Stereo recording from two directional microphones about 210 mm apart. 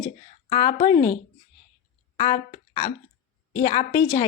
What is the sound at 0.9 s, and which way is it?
Speech, 15° left (ahead or behind).